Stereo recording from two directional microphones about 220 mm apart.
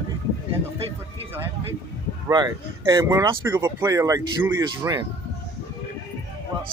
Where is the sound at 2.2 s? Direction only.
15° right (ahead or behind).